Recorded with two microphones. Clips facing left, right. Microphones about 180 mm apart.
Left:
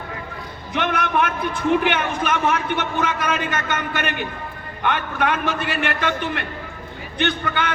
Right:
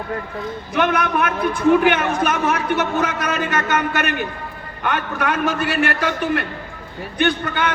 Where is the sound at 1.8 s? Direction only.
50° right (ahead or behind).